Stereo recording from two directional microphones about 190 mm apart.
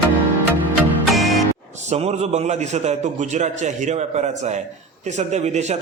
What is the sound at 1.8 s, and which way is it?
A man's voice, 35° right (ahead or behind).